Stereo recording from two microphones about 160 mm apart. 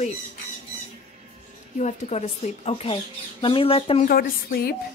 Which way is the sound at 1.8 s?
45° left (ahead or behind).